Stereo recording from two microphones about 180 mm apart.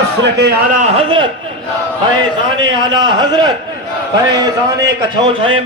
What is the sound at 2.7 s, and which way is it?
Speech, 25° right (ahead or behind).